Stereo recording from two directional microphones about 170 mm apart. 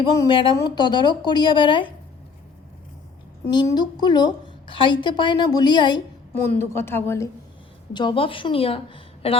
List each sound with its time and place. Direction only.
0.1 s a woman's voice: 25° left (ahead or behind)
3.4 s a woman's voice: 20° left (ahead or behind)
6.7 s a woman's voice: 15° left (ahead or behind)
7.9 s a woman's voice: 30° left (ahead or behind)